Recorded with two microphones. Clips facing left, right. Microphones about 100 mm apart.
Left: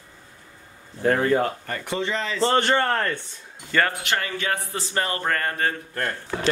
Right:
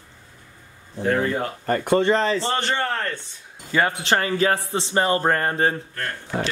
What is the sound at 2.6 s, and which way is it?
Speech, 45° left (ahead or behind).